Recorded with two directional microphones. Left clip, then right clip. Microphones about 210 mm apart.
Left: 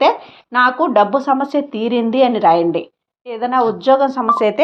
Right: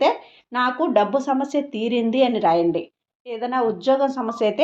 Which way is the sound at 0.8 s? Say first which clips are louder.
Left 6 dB; 10° left (ahead or behind).